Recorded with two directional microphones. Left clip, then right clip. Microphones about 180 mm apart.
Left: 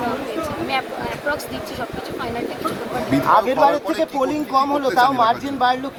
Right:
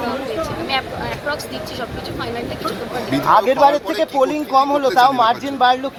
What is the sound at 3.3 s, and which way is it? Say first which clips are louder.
Speech: right 3 dB; 55° right (ahead or behind).